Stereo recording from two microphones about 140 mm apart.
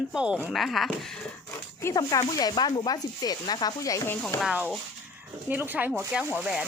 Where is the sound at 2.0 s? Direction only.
25° left (ahead or behind).